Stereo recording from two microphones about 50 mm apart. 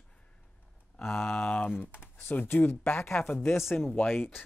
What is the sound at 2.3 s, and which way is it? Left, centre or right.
Speech, left.